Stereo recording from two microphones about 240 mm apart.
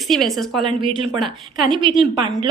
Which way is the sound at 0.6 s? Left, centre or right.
Right.